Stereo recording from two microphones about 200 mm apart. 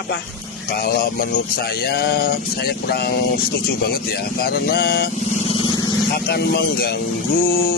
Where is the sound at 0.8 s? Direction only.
45° left (ahead or behind).